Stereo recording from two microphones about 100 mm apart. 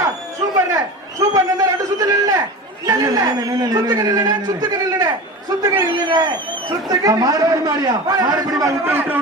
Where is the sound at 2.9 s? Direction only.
40° right (ahead or behind).